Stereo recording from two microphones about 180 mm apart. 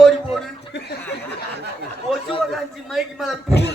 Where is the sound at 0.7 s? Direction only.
70° left (ahead or behind).